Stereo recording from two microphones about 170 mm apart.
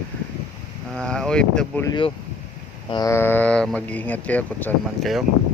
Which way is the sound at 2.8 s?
25° left (ahead or behind).